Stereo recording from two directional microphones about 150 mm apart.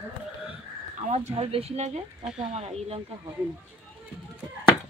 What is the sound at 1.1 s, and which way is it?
Speech, 45° right (ahead or behind).